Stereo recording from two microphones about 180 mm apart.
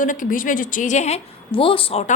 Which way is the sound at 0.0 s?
45° left (ahead or behind).